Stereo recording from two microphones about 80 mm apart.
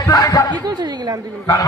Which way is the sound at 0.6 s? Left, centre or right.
Right.